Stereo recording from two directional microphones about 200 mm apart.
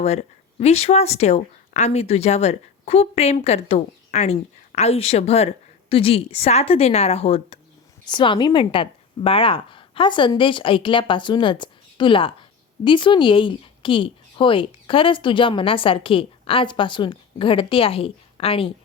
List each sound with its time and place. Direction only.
0.0 s a woman's voice: 35° left (ahead or behind)